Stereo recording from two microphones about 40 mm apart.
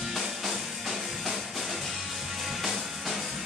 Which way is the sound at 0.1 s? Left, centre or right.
Centre.